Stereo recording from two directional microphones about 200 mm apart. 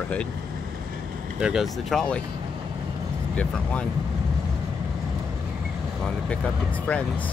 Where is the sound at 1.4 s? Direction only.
Centre (ahead or behind).